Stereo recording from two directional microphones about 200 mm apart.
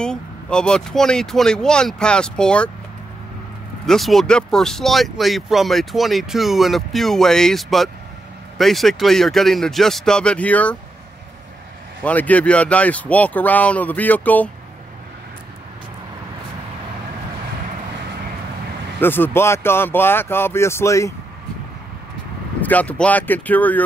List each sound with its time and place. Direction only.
0.0 s speech: 5° left (ahead or behind)
3.8 s speech: centre (ahead or behind)
12.0 s speech: 5° left (ahead or behind)
18.9 s speech: 10° left (ahead or behind)
22.6 s speech: 10° left (ahead or behind)